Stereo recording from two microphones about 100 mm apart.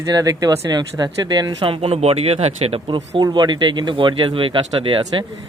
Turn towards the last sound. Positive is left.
turn(degrees=-60)  # may be behind; listen again after turning